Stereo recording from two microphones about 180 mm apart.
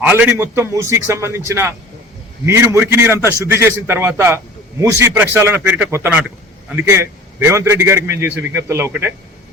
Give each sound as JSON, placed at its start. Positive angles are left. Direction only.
{"t": 0.0, "sound": "a man's voice", "side_deg": -10}